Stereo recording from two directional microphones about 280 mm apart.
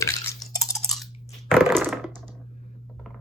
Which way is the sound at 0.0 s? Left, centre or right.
Centre.